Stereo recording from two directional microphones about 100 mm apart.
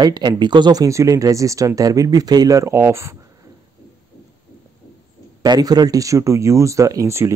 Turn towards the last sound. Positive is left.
turn(degrees=-30)  # may be behind; listen again after turning